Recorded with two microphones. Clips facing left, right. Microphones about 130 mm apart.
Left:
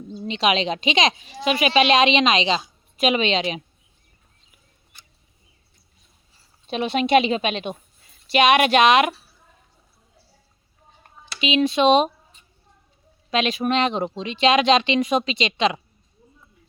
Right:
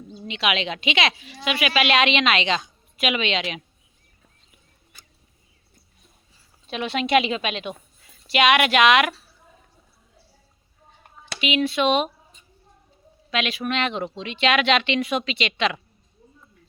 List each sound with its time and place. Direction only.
0.1 s a woman's voice: 30° left (ahead or behind)
3.0 s speech: 35° left (ahead or behind)
6.7 s a woman's voice: 20° left (ahead or behind)
11.3 s a woman's voice: 25° left (ahead or behind)
13.3 s speech: 35° left (ahead or behind)